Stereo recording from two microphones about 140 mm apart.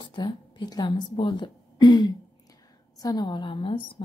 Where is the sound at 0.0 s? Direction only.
35° left (ahead or behind).